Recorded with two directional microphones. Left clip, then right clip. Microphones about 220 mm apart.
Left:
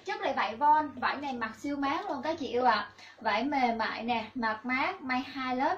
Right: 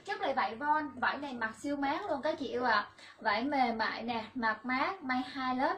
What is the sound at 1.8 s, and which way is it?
A woman's voice, 10° right (ahead or behind).